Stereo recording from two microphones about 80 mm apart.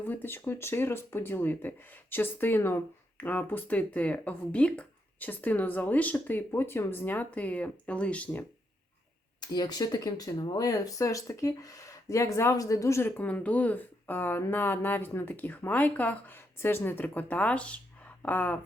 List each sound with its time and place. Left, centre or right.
0.0 s speech: left
9.4 s speech: left
13.1 s speech: left